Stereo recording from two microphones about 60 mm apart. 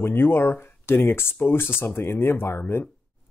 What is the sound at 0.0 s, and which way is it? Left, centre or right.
Speech, left.